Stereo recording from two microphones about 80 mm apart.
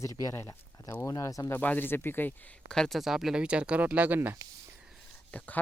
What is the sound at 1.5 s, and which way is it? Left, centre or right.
Speech, left.